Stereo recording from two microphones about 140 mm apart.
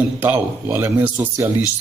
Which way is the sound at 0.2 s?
15° right (ahead or behind).